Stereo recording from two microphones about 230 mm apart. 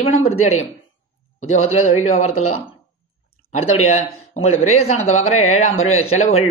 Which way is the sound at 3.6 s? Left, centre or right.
Left.